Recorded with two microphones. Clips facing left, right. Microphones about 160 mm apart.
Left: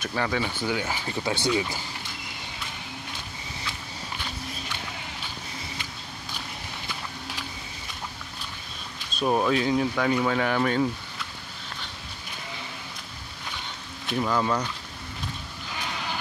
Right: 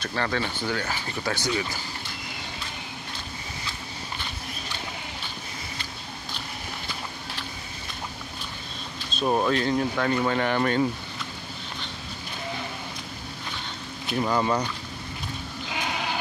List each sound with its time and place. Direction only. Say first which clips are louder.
0.0 s speech: even; 10° left (ahead or behind)
9.2 s speech: even; 5° left (ahead or behind)
14.0 s speech: right 1 dB; 5° right (ahead or behind)